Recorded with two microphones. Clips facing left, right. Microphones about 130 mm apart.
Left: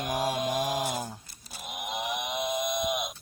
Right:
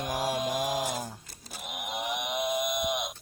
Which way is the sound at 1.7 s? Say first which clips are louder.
Left 1 dB; 25° left (ahead or behind).